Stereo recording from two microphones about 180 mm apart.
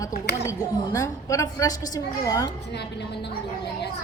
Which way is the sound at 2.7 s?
70° left (ahead or behind).